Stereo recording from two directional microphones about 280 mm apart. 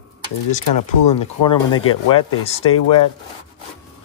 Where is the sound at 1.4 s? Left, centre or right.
Left.